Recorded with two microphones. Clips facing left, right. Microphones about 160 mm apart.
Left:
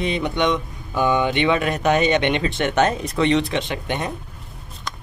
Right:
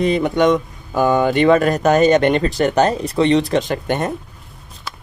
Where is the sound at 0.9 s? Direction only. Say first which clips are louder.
Right 4 dB; 40° right (ahead or behind).